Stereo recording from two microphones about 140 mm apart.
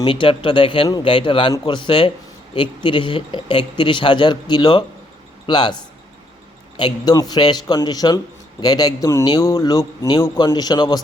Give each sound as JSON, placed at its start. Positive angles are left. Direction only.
{"t": 0.0, "sound": "a man's voice", "side_deg": 40}